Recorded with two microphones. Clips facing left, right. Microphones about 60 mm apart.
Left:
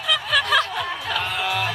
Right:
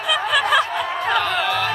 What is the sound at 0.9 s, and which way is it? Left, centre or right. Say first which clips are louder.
Music: right 7 dB; right.